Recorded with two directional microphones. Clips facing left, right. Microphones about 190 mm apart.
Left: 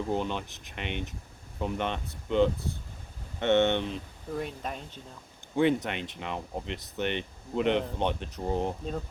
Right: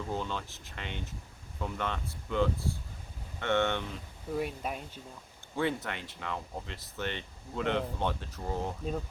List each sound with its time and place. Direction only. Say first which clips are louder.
0.1 s speech: left 5 dB; 20° left (ahead or behind)
4.4 s speech: right 1 dB; 10° right (ahead or behind)
5.5 s speech: left 7 dB; 20° left (ahead or behind)